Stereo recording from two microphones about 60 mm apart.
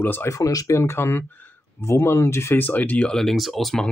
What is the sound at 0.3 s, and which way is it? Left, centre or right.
Speech, left.